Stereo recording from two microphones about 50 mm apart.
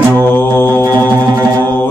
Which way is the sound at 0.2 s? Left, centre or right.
Left.